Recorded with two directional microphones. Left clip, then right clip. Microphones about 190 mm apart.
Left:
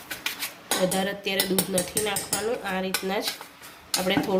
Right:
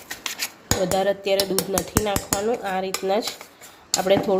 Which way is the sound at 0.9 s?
45° right (ahead or behind).